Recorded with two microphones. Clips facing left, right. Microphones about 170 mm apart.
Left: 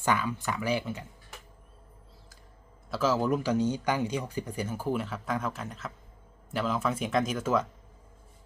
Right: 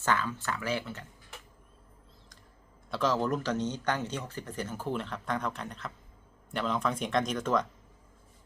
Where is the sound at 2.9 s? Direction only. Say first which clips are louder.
Left 2 dB; 5° left (ahead or behind).